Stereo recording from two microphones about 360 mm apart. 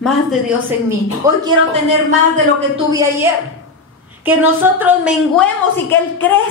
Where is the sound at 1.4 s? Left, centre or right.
Centre.